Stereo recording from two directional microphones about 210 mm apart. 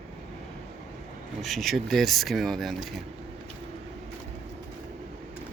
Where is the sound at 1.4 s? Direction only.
Centre (ahead or behind).